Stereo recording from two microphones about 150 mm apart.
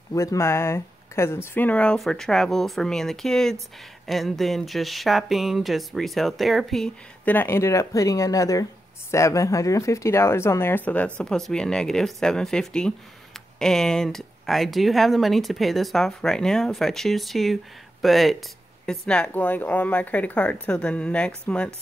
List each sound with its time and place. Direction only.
0.1 s a woman's voice: 20° left (ahead or behind)